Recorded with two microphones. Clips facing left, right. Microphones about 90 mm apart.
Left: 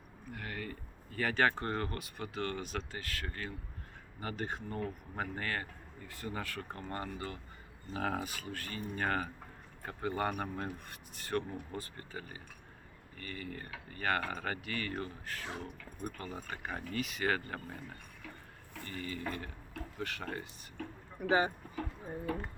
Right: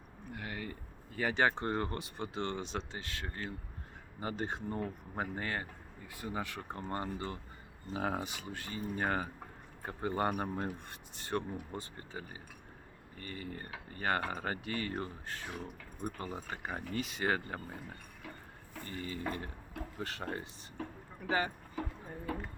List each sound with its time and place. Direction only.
0.3 s speech: 15° right (ahead or behind)
18.9 s speech: 25° right (ahead or behind)
21.2 s speech: 20° left (ahead or behind)